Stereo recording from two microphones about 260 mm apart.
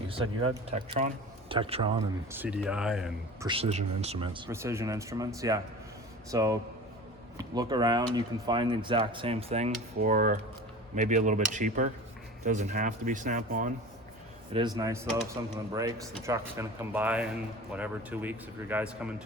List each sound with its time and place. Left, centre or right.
0.1 s speech: right
2.3 s speech: centre
3.4 s speech: right
14.5 s speech: centre